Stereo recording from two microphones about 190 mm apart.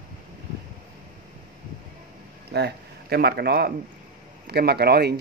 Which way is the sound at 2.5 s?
60° right (ahead or behind).